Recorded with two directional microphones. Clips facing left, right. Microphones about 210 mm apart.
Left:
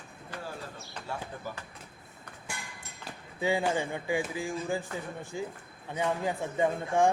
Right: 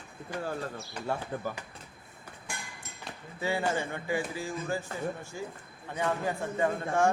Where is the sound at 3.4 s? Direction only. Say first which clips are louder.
Left 2 dB; 15° left (ahead or behind).